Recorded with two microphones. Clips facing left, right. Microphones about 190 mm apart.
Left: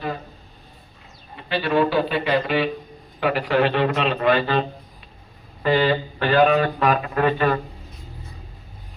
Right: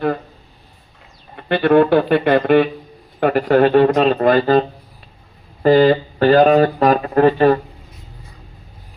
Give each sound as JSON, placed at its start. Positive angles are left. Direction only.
{"t": 1.4, "sound": "speech", "side_deg": -55}
{"t": 5.6, "sound": "speech", "side_deg": -40}